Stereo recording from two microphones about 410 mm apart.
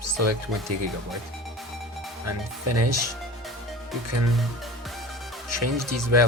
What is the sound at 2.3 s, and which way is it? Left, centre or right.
Speech, right.